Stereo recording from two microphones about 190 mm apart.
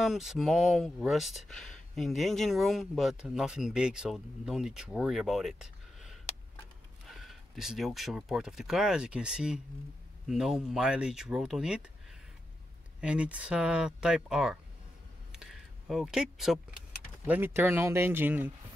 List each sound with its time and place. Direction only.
0.0 s speech: centre (ahead or behind)
13.0 s speech: 5° right (ahead or behind)
15.3 s a sound: centre (ahead or behind)
17.3 s speech: 10° right (ahead or behind)